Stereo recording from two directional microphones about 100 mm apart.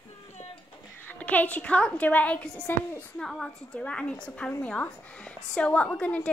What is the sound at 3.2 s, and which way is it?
A woman's voice, 5° left (ahead or behind).